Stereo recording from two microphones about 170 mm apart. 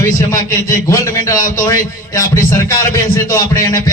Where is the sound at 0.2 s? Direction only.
20° left (ahead or behind).